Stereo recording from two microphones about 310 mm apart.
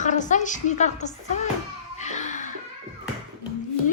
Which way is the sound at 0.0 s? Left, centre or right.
Left.